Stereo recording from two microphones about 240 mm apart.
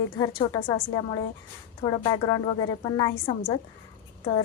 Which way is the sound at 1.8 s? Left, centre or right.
Left.